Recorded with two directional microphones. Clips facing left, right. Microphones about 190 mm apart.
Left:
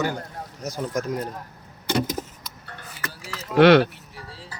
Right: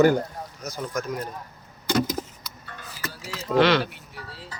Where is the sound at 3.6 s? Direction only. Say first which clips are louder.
Left 7 dB; 60° left (ahead or behind).